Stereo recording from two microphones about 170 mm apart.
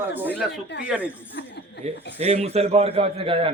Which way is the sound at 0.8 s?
5° right (ahead or behind).